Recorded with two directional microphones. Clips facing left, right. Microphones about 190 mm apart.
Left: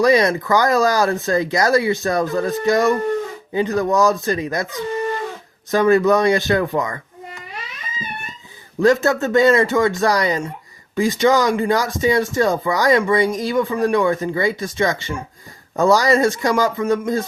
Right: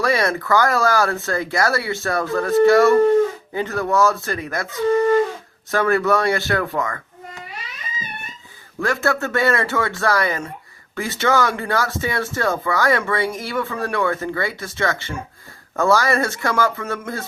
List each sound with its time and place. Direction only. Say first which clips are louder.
0.0 s speech: left 5 dB; 20° left (ahead or behind)
5.7 s speech: left 4 dB; 20° left (ahead or behind)
8.8 s speech: left 6 dB; 20° left (ahead or behind)